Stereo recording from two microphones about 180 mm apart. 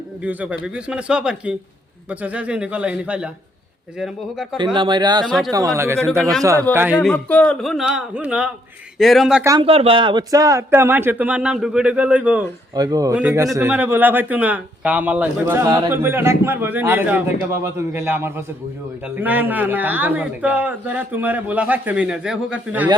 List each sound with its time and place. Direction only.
0.2 s a man's voice: 10° right (ahead or behind)
4.5 s speech: 25° right (ahead or behind)
5.2 s a man's voice: centre (ahead or behind)
5.5 s speech: 20° right (ahead or behind)
6.7 s a man's voice: 10° left (ahead or behind)
9.4 s speech: 20° right (ahead or behind)
9.6 s speech: 30° right (ahead or behind); by 12.5 s 10° right (ahead or behind)
12.7 s speech: 20° right (ahead or behind)